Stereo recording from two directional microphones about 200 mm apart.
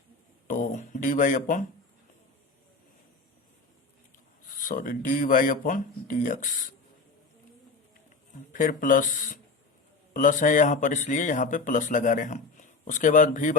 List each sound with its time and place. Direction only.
0.4 s a sound: 40° left (ahead or behind)
4.4 s speech: 40° left (ahead or behind)
8.5 s speech: 40° left (ahead or behind)